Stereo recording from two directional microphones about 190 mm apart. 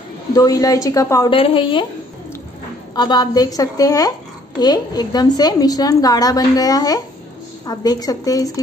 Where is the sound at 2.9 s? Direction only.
20° left (ahead or behind).